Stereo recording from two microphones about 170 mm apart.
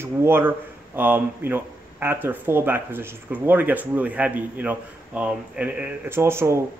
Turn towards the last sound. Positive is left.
turn(degrees=-15)  # may be behind; listen again after turning